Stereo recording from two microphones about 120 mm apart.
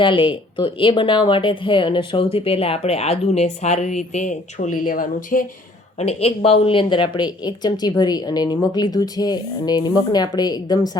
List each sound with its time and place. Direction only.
0.0 s speech: 45° left (ahead or behind); by 5.5 s 90° left
6.0 s speech: 60° left (ahead or behind); by 10.9 s 35° left (ahead or behind)